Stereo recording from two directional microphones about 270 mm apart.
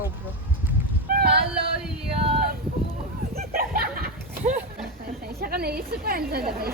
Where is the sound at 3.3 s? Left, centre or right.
Right.